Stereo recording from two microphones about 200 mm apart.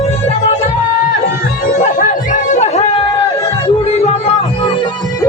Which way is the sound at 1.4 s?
45° left (ahead or behind).